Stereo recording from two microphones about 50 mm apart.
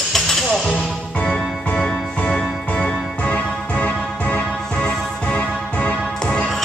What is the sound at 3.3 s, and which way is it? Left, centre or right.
Music, left.